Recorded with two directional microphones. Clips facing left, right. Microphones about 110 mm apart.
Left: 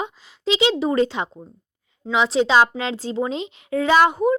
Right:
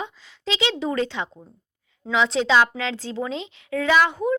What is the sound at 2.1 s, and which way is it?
Speech, 5° left (ahead or behind).